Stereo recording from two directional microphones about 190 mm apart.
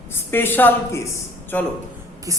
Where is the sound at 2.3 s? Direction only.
15° right (ahead or behind).